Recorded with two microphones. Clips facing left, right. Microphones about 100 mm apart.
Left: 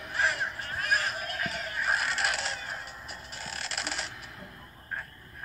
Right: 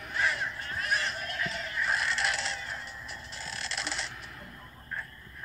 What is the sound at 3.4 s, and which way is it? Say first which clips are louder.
Mechanisms: even; 45° left (ahead or behind).